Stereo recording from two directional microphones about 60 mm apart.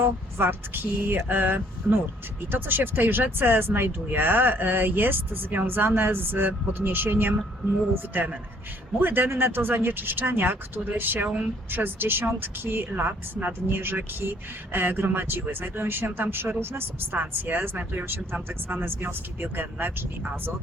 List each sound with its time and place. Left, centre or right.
0.0 s speech: right
17.2 s speech: right